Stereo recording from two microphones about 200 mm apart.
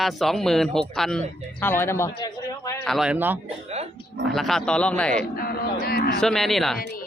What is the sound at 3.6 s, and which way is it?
Dog, 30° right (ahead or behind).